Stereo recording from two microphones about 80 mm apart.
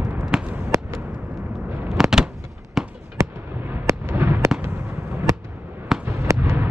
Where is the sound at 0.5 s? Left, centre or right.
Right.